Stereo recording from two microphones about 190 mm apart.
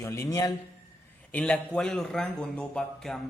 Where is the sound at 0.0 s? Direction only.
15° left (ahead or behind).